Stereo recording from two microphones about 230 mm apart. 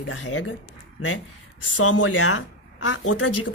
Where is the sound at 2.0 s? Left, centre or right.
Left.